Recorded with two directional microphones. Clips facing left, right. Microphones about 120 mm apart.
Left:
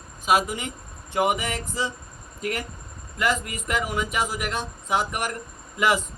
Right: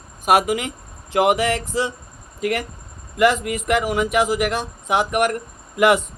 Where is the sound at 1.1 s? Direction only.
80° right.